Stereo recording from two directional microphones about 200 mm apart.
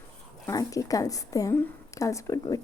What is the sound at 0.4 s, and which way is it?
Speech, 15° left (ahead or behind).